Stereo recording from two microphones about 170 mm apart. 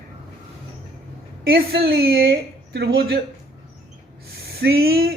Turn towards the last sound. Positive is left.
turn(degrees=-65)  # may be behind; listen again after turning